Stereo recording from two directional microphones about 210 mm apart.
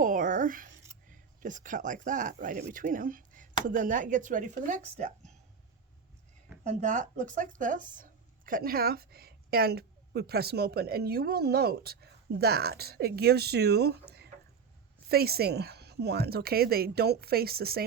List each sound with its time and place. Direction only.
0.0 s a sound: 40° right (ahead or behind)
1.4 s speech: 40° right (ahead or behind)
6.7 s speech: 35° right (ahead or behind)